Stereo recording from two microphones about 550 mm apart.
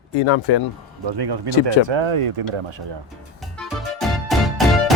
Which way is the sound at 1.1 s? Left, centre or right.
Right.